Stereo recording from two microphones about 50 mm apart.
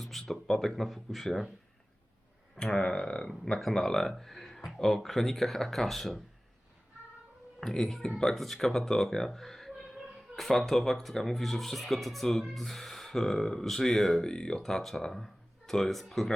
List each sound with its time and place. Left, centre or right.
0.0 s speech: centre
2.6 s speech: centre
3.6 s speech: centre
7.6 s speech: centre